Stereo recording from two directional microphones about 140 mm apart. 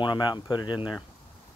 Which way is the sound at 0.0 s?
30° left (ahead or behind).